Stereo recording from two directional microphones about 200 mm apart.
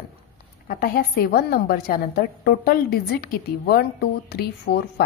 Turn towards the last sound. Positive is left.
turn(degrees=50)  # may be behind; listen again after turning